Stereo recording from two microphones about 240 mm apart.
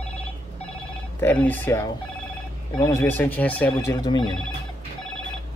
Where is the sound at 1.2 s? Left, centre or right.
Centre.